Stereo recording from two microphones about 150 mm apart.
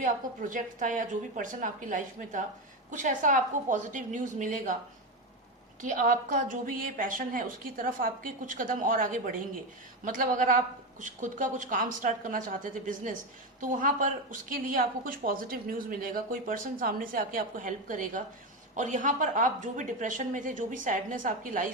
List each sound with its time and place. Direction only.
0.0 s a woman's voice: 60° right (ahead or behind)
5.8 s a woman's voice: 65° right (ahead or behind)